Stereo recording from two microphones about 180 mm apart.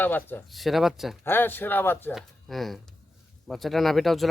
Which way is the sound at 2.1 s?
Centre (ahead or behind).